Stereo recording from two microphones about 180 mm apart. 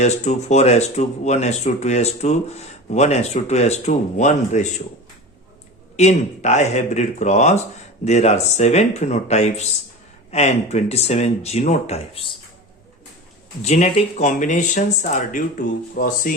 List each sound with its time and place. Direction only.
0.0 s speech: 40° left (ahead or behind)
6.0 s speech: 40° left (ahead or behind)
13.6 s speech: 40° left (ahead or behind)